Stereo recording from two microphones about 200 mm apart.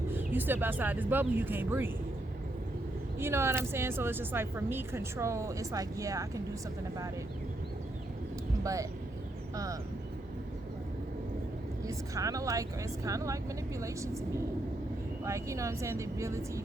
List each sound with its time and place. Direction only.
0.1 s a woman's voice: 10° right (ahead or behind)
3.2 s a woman's voice: 10° right (ahead or behind)
8.6 s a woman's voice: 15° right (ahead or behind)
11.9 s a woman's voice: 15° right (ahead or behind)